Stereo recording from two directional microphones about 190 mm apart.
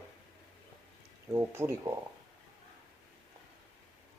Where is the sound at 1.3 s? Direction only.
15° right (ahead or behind).